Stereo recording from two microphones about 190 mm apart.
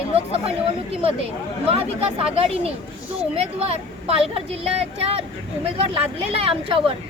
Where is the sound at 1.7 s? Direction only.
30° right (ahead or behind).